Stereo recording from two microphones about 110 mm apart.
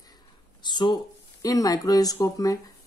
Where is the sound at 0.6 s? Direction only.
40° left (ahead or behind).